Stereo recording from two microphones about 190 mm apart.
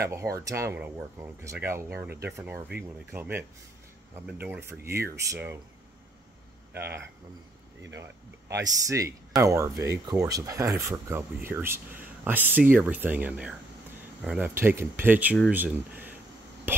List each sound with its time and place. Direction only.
0.1 s speech: 15° right (ahead or behind)
7.9 s speech: 15° right (ahead or behind)